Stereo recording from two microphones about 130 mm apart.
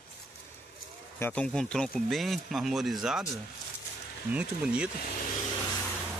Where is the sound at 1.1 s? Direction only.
15° left (ahead or behind); by 4.9 s 10° right (ahead or behind).